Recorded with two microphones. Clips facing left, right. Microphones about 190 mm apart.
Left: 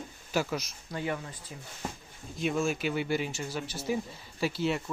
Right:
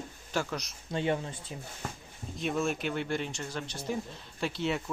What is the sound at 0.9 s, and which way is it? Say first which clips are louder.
Speech: right 4 dB; 25° right (ahead or behind).